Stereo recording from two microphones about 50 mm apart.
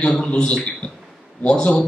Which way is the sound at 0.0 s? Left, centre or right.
Centre.